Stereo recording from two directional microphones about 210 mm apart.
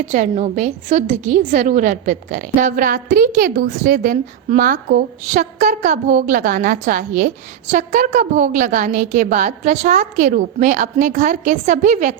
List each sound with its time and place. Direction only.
0.1 s a woman's voice: 35° right (ahead or behind)